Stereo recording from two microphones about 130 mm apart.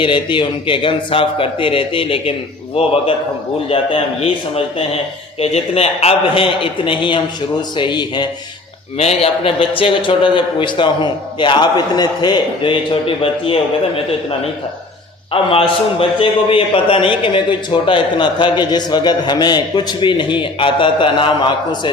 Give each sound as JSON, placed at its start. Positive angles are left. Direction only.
{"t": 0.0, "sound": "a man's voice", "side_deg": 40}
{"t": 9.0, "sound": "a man's voice", "side_deg": 50}